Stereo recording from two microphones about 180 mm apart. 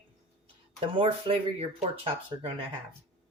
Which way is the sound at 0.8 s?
30° right (ahead or behind).